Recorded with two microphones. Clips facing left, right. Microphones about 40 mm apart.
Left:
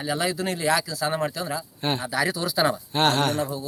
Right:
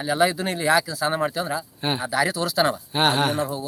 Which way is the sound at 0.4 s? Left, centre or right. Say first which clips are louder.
Right 3 dB; centre.